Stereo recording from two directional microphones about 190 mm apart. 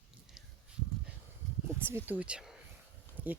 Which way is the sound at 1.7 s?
10° right (ahead or behind).